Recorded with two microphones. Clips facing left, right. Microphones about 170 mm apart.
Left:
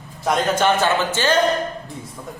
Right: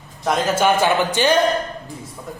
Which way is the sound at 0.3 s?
10° right (ahead or behind).